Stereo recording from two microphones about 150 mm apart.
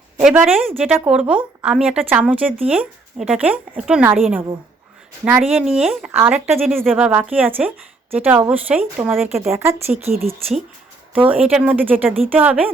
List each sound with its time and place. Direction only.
0.2 s a woman's voice: 5° right (ahead or behind)
9.8 s speech: 45° right (ahead or behind)
10.5 s speech: 5° right (ahead or behind)